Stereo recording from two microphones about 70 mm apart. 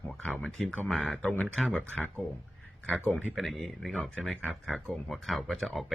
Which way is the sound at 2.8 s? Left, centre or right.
Centre.